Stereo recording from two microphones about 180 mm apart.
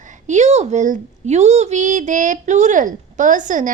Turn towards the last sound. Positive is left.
turn(degrees=-45)  # may be behind; listen again after turning